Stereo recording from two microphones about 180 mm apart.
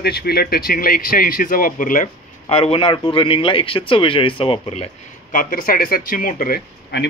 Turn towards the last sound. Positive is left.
turn(degrees=60)  # may be behind; listen again after turning